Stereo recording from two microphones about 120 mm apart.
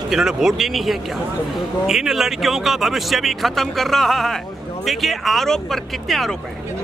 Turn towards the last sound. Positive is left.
turn(degrees=0)  # may be behind; listen again after turning